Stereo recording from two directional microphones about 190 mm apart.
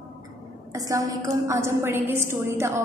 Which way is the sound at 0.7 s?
15° right (ahead or behind).